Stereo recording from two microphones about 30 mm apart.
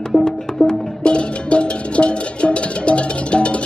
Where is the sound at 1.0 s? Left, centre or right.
Left.